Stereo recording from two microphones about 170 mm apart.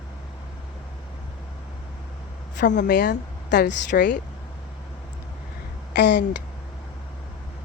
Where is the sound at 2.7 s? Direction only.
80° left.